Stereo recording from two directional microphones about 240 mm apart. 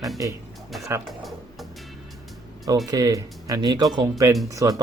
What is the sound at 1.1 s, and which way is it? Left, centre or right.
Music, centre.